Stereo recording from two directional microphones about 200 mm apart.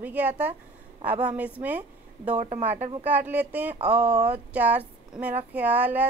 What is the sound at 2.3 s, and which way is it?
Speech, 35° right (ahead or behind).